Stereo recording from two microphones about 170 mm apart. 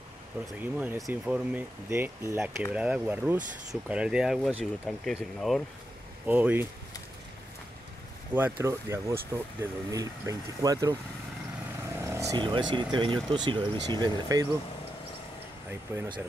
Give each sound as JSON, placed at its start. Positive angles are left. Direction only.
{"t": 0.6, "sound": "speech", "side_deg": -10}
{"t": 6.2, "sound": "speech", "side_deg": -10}
{"t": 8.3, "sound": "speech", "side_deg": -10}
{"t": 12.0, "sound": "speech", "side_deg": -15}
{"t": 15.9, "sound": "speech", "side_deg": -10}